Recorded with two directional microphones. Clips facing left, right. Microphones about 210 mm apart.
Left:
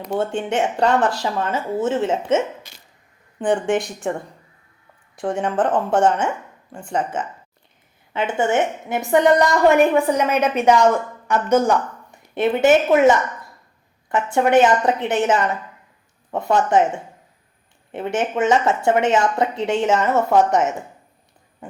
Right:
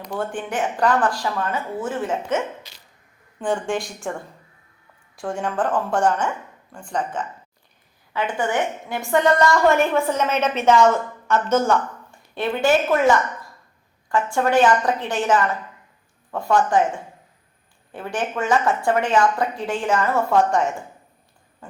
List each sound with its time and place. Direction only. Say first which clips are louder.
0.0 s a woman's voice: left 5 dB; 25° left (ahead or behind)
2.7 s hiccup: left 1 dB; 50° left (ahead or behind)
3.3 s a woman's voice: left 4 dB; 20° left (ahead or behind)
5.1 s a woman's voice: left 4 dB; 20° left (ahead or behind)
21.6 s owl: left 5 dB; 20° left (ahead or behind)